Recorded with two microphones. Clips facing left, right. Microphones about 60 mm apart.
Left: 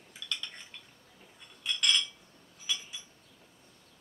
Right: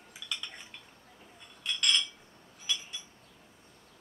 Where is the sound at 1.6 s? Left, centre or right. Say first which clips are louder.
Even; centre.